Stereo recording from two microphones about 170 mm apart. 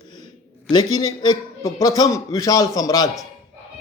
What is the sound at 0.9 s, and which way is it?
A man's voice, 25° left (ahead or behind).